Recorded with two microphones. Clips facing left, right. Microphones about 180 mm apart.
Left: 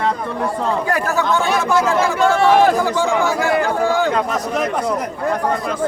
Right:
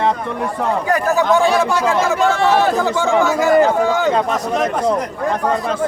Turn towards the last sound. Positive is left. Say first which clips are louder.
# right 2 dB
turn(degrees=-20)  # may be behind; listen again after turning